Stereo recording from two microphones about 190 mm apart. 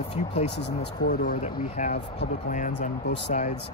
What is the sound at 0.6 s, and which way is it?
Speech, 60° left (ahead or behind).